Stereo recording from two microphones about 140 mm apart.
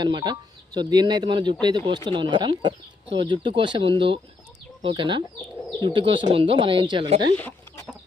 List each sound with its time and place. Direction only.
0.0 s speech: 30° right (ahead or behind)